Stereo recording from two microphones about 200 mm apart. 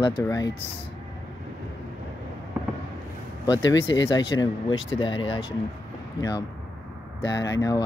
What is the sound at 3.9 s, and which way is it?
Speech, 20° left (ahead or behind).